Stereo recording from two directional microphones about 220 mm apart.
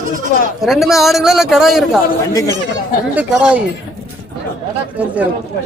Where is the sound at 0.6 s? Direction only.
Centre (ahead or behind).